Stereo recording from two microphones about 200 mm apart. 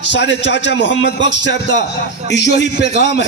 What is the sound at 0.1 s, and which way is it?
A man's voice, 60° left (ahead or behind).